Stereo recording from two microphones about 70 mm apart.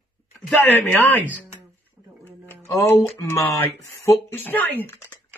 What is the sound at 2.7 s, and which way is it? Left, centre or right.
Speech, left.